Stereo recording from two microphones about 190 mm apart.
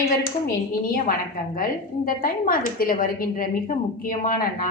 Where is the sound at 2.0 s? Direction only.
45° left (ahead or behind).